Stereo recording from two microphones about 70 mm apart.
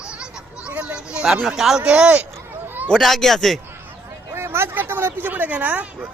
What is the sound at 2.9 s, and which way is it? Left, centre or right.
Speech, centre.